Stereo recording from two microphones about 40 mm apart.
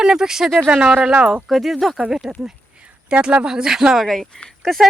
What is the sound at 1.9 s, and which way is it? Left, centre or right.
Speech, centre.